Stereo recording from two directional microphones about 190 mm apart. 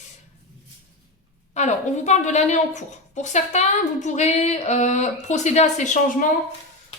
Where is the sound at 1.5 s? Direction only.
35° left (ahead or behind).